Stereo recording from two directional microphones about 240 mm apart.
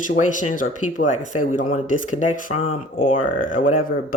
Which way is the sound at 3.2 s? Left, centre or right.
Left.